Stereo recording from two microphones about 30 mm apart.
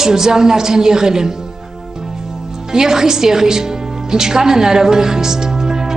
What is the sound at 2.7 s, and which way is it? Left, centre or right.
A woman's voice, centre.